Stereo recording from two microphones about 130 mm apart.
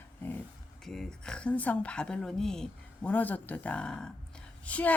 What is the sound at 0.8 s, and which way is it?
Speech, 5° left (ahead or behind).